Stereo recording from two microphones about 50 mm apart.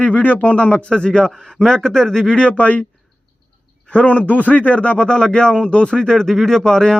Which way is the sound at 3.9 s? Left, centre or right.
Left.